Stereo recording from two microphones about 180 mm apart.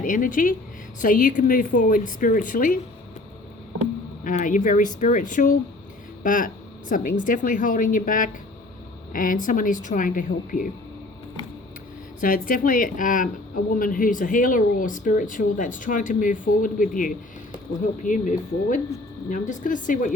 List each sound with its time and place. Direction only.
0.0 s speech: 50° left (ahead or behind)
3.8 s speech: 45° left (ahead or behind)
12.2 s speech: 50° left (ahead or behind)